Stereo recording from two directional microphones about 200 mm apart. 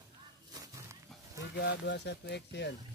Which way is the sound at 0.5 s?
15° right (ahead or behind).